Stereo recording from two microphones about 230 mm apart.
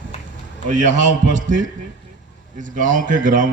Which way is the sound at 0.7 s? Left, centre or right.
Right.